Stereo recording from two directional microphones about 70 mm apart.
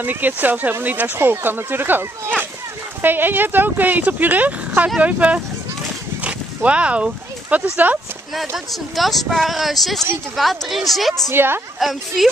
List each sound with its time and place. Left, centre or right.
0.0 s speech: right
6.2 s a sound: centre
7.7 s speech: right
8.4 s speech: centre
11.2 s a woman's voice: right
11.8 s speech: centre